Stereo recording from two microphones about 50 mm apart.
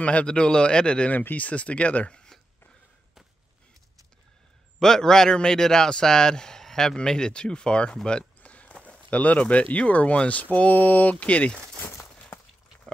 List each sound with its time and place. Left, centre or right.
0.0 s speech: left
1.1 s speech: left
4.7 s a man's voice: centre
8.4 s walk: left
8.8 s a sound: left
9.5 s speech: left